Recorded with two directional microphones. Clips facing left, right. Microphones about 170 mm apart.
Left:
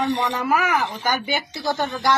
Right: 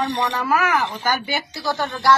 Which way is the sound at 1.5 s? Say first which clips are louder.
Even; 20° left (ahead or behind).